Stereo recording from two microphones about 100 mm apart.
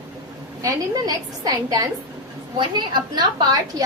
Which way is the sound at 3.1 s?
40° right (ahead or behind).